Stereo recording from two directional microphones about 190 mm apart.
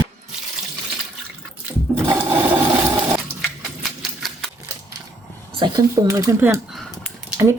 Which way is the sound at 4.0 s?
Centre (ahead or behind).